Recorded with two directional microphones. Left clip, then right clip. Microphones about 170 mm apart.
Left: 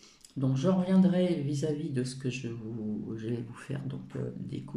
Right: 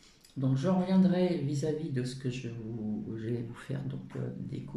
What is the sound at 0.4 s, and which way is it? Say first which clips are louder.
Speech: left 1 dB; 10° left (ahead or behind).